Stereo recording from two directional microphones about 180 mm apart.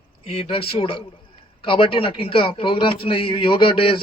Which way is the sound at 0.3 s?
30° left (ahead or behind).